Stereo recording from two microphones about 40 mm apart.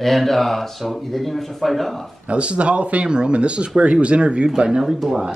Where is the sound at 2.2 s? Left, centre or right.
Right.